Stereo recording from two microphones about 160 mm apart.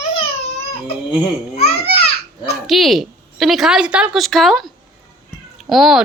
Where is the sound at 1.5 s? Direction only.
40° left (ahead or behind).